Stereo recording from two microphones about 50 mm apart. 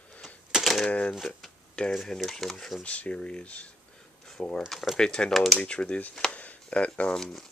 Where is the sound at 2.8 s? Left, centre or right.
Left.